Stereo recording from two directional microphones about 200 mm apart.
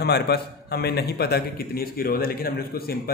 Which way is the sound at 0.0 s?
55° left (ahead or behind).